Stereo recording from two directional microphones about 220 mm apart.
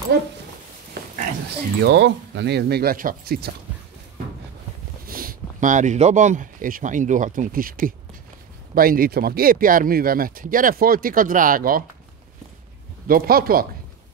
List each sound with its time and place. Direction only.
0.1 s speech: 50° right (ahead or behind)
1.8 s speech: 50° right (ahead or behind)
5.0 s speech: 40° right (ahead or behind)
13.0 s speech: 40° right (ahead or behind)